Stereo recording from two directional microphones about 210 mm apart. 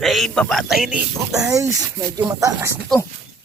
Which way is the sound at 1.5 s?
15° right (ahead or behind).